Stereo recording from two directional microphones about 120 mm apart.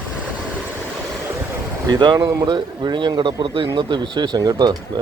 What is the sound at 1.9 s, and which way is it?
A man's voice, 40° right (ahead or behind).